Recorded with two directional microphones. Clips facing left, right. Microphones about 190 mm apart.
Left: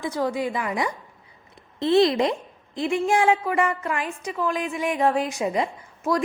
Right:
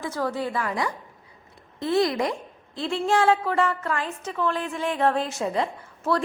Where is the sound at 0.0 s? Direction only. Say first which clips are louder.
Left 2 dB; 15° left (ahead or behind).